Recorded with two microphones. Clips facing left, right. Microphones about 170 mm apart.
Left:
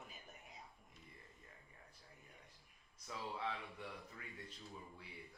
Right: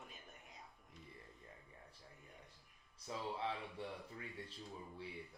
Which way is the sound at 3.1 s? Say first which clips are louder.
Right 2 dB; 30° right (ahead or behind).